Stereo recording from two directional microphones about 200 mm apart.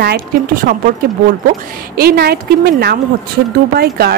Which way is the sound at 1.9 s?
50° right (ahead or behind).